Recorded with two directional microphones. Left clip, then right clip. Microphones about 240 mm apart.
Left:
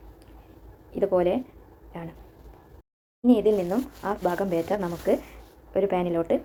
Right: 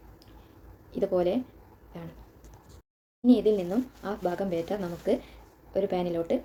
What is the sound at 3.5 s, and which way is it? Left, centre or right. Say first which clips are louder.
Speech: left 3 dB; centre.